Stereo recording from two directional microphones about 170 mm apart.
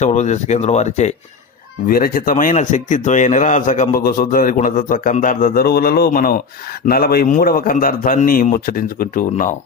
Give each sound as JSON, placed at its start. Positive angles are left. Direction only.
{"t": 0.0, "sound": "a man's voice", "side_deg": 45}
{"t": 1.9, "sound": "a man's voice", "side_deg": 60}